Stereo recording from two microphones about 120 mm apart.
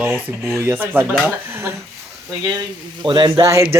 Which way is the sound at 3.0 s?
40° right (ahead or behind).